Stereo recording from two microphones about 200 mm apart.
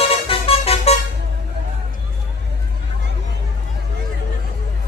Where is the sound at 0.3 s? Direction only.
30° left (ahead or behind).